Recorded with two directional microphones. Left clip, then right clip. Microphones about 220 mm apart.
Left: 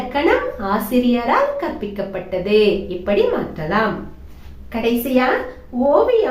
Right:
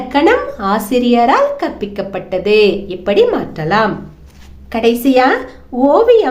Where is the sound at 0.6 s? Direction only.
50° right (ahead or behind).